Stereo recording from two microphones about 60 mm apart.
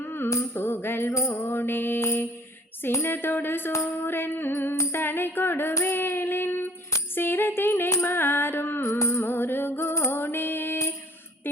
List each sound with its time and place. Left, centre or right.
0.0 s music: left
2.0 s mantra: left
2.9 s music: left
5.8 s child singing: left
7.2 s music: left
8.9 s music: left
9.8 s music: left